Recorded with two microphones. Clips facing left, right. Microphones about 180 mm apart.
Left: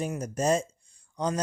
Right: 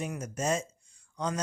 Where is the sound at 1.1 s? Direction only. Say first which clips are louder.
Left 4 dB; 30° left (ahead or behind).